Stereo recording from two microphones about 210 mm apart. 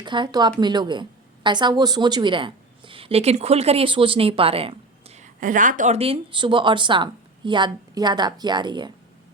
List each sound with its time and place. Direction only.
0.0 s a woman's voice: 20° right (ahead or behind)